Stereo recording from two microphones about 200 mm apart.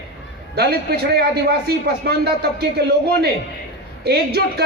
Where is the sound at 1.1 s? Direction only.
55° right (ahead or behind).